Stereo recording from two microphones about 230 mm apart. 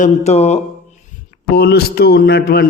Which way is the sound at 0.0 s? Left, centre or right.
Left.